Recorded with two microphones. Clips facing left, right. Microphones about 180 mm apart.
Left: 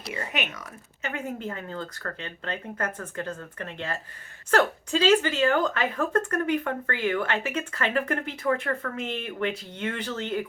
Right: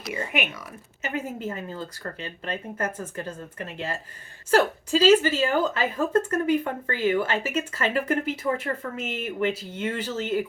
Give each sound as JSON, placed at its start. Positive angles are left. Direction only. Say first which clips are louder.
{"t": 0.1, "sound": "speech", "louder": "right 3 dB", "side_deg": -10}